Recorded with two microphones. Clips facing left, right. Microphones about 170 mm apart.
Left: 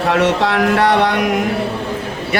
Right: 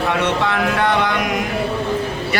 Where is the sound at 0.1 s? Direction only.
85° left; by 1.2 s 70° left (ahead or behind).